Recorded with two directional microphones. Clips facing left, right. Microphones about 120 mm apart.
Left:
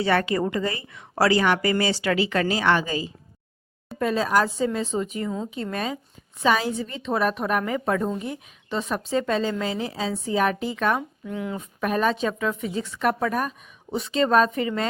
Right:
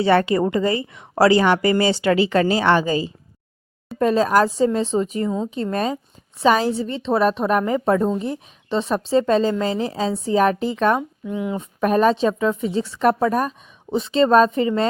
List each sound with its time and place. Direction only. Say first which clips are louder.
0.0 s a woman's voice: right 5 dB; 30° right (ahead or behind)
11.3 s a woman's voice: right 5 dB; 20° right (ahead or behind)
11.8 s a woman's voice: right 6 dB; 40° right (ahead or behind)